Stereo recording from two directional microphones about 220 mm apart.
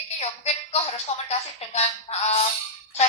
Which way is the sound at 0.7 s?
30° left (ahead or behind).